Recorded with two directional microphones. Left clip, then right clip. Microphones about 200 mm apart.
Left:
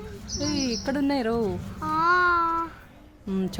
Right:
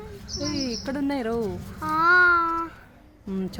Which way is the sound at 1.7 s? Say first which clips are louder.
Right 3 dB; 25° right (ahead or behind).